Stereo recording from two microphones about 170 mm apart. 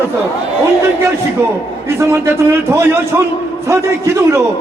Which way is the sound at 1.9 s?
15° right (ahead or behind).